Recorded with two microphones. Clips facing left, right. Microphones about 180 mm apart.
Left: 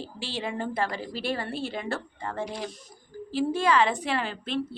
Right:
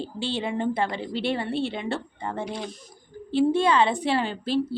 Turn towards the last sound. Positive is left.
turn(degrees=-35)  # may be behind; listen again after turning